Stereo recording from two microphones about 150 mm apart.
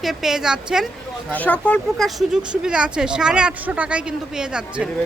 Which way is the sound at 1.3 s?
10° left (ahead or behind).